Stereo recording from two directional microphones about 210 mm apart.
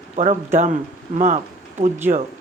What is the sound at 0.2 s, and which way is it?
Speech, 35° right (ahead or behind).